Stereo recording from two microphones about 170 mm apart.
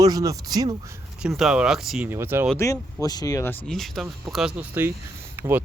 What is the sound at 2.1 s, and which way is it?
Speech, 15° right (ahead or behind).